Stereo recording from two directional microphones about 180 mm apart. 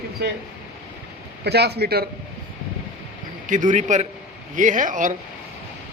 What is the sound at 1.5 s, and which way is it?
Speech, 65° right (ahead or behind).